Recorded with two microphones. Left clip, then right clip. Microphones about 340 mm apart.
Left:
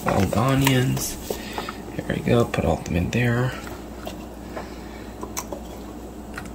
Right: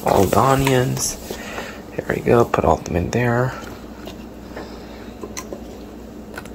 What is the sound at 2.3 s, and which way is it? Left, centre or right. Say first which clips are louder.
Speech: right 6 dB; centre.